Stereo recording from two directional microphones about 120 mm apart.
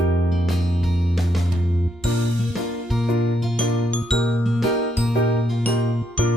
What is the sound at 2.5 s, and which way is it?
Music, centre (ahead or behind).